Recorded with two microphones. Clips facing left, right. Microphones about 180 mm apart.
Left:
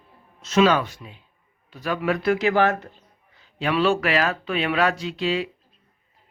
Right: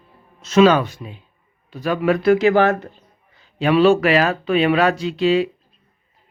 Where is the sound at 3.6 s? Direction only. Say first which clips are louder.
Right 7 dB; 30° right (ahead or behind).